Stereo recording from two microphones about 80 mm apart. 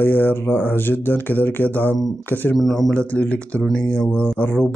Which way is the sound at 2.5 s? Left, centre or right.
Centre.